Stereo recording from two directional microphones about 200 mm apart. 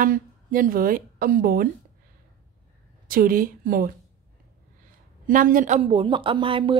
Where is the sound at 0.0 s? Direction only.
45° right (ahead or behind).